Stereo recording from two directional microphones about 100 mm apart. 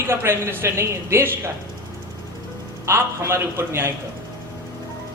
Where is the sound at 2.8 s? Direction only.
25° right (ahead or behind).